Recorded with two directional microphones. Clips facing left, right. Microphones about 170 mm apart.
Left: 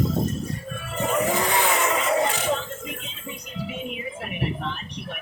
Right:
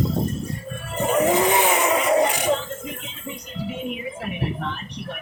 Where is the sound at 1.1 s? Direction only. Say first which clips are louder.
Right 5 dB; 20° right (ahead or behind).